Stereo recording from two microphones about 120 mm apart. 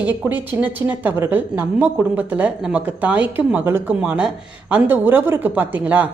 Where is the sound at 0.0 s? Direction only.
15° right (ahead or behind).